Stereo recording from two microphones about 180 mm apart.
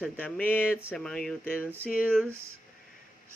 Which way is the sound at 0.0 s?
5° left (ahead or behind).